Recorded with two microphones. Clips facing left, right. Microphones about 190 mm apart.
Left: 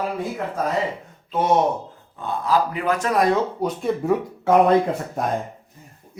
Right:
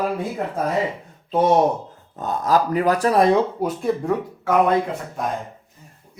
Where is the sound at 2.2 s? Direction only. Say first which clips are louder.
Right 2 dB; 45° right (ahead or behind).